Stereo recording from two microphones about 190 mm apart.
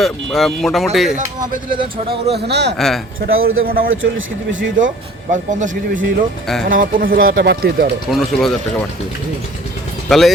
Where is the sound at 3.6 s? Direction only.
50° right (ahead or behind).